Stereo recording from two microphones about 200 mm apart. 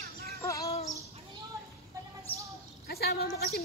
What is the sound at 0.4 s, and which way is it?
Bird, 15° left (ahead or behind).